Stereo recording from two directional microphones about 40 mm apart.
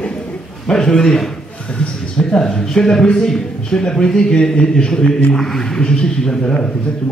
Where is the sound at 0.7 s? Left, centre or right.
Centre.